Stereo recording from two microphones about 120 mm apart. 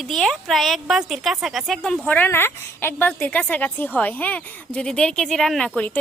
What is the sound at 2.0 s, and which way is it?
A woman's voice, 15° left (ahead or behind).